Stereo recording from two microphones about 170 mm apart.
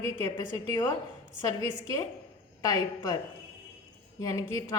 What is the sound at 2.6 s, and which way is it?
Speech, 20° left (ahead or behind).